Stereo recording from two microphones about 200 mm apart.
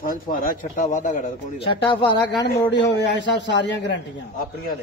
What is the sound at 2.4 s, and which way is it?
A man's voice, 60° left (ahead or behind).